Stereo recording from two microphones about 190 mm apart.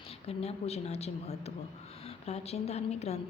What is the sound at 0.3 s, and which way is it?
A woman's voice, 30° left (ahead or behind).